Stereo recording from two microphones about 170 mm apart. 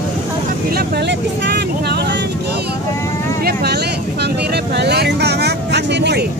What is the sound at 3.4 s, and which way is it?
Vehicle, 65° right (ahead or behind).